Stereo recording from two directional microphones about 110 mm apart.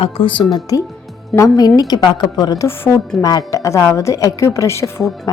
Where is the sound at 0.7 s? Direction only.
35° left (ahead or behind).